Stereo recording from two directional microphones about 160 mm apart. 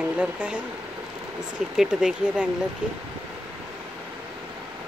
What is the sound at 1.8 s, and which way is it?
Speech, 5° right (ahead or behind).